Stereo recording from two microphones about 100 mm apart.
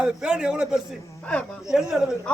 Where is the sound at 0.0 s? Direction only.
5° right (ahead or behind).